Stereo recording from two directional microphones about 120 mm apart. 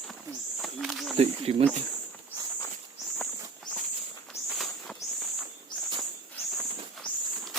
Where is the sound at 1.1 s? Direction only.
55° right (ahead or behind).